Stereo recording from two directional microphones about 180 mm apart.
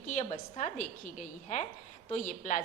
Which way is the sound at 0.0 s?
45° left (ahead or behind).